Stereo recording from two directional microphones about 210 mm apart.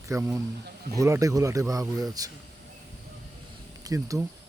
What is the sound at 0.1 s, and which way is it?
Speech, 10° right (ahead or behind).